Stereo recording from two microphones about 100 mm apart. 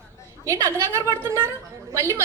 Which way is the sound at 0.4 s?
25° right (ahead or behind).